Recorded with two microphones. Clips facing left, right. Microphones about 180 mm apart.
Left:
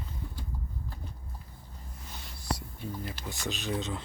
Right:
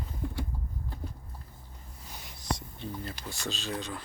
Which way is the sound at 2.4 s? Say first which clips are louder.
Right 1 dB; 10° left (ahead or behind).